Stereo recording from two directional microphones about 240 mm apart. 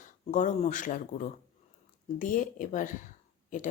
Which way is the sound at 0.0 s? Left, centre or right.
Left.